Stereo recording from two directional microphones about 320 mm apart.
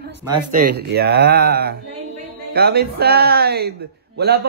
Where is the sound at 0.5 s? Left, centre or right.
Right.